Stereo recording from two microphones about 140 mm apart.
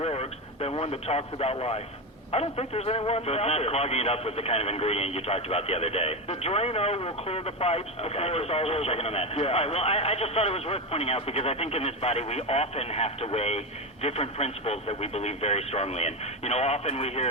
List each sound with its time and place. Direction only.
0.0 s radio: 45° left (ahead or behind)
2.3 s speech: 45° left (ahead or behind)